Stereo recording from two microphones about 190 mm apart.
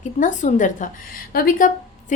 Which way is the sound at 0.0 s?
40° left (ahead or behind).